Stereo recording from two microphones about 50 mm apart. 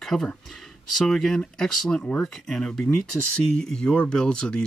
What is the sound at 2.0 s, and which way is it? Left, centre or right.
Speech, left.